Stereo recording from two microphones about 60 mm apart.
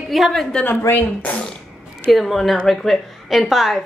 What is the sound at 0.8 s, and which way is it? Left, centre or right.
Speech, left.